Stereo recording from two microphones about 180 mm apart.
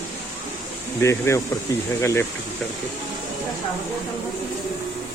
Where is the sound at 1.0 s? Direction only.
15° left (ahead or behind).